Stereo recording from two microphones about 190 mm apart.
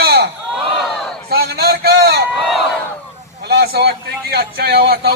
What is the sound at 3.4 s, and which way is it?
A man's voice, 55° right (ahead or behind).